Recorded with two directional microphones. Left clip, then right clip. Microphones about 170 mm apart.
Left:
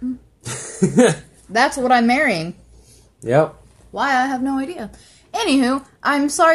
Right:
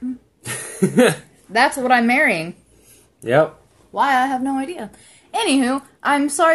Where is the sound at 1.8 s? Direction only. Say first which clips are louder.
Even; 10° left (ahead or behind).